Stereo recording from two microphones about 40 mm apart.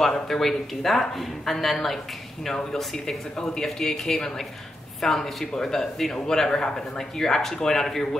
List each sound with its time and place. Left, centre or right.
0.0 s speech: centre